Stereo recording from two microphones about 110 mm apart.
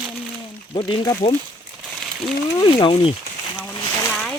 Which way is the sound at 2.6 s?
50° left (ahead or behind).